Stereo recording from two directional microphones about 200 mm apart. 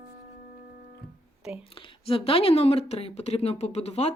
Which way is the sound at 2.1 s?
30° left (ahead or behind).